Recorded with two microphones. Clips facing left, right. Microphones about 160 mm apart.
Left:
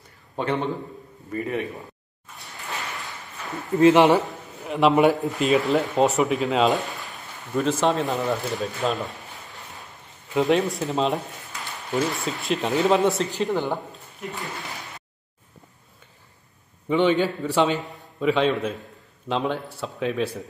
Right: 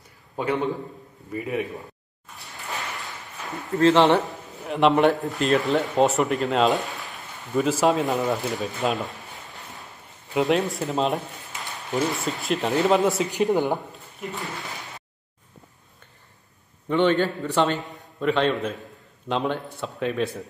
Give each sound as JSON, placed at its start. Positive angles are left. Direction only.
{"t": 1.3, "sound": "speech", "side_deg": -5}
{"t": 3.7, "sound": "a man's voice", "side_deg": 15}
{"t": 4.3, "sound": "speech", "side_deg": 0}
{"t": 10.3, "sound": "speech", "side_deg": 0}
{"t": 11.5, "sound": "a sound", "side_deg": -20}
{"t": 11.9, "sound": "speech", "side_deg": 0}
{"t": 13.3, "sound": "speech", "side_deg": -15}
{"t": 16.9, "sound": "a man's voice", "side_deg": 5}